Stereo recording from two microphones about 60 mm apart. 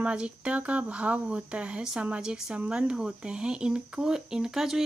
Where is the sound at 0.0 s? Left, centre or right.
Centre.